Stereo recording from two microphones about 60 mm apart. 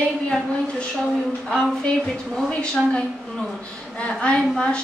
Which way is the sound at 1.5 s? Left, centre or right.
Centre.